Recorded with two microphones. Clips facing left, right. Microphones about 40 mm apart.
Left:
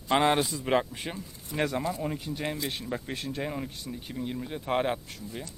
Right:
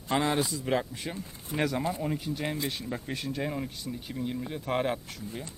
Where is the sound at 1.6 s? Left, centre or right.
Centre.